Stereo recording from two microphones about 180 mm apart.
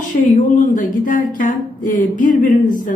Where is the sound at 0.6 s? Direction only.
45° left (ahead or behind).